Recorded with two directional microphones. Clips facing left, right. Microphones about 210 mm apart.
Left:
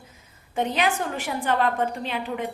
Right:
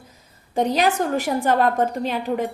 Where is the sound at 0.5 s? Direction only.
40° right (ahead or behind).